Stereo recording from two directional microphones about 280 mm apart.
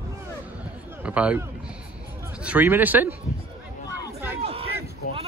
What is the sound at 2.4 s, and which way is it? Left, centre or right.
Speech, centre.